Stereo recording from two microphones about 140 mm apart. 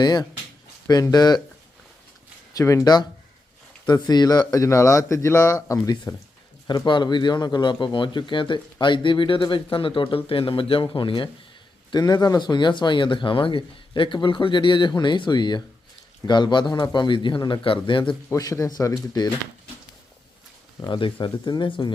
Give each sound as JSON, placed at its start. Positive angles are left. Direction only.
{"t": 0.0, "sound": "speech", "side_deg": 30}
{"t": 2.5, "sound": "speech", "side_deg": 25}
{"t": 6.7, "sound": "speech", "side_deg": 35}
{"t": 18.3, "sound": "speech", "side_deg": 25}
{"t": 20.8, "sound": "speech", "side_deg": 35}